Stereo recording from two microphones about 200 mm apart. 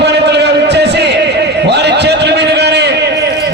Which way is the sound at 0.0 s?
55° right (ahead or behind).